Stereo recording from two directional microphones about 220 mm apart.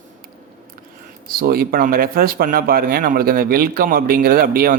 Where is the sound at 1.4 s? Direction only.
40° right (ahead or behind).